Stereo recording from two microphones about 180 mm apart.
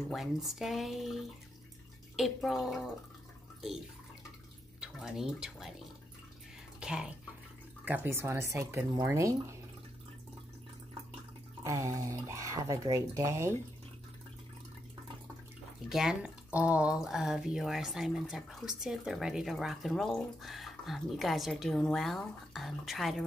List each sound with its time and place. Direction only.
0.1 s speech: centre (ahead or behind)
4.7 s speech: 5° right (ahead or behind)
6.8 s speech: 5° right (ahead or behind)
11.6 s speech: 15° right (ahead or behind)
15.9 s speech: 5° right (ahead or behind)